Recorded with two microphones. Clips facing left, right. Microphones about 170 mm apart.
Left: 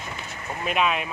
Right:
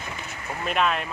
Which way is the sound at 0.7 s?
5° left (ahead or behind).